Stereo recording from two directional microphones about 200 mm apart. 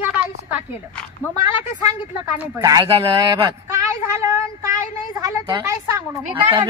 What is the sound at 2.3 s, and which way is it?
A woman's voice, 10° right (ahead or behind).